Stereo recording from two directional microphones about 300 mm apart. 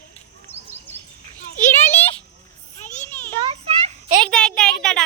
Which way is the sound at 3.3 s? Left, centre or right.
Centre.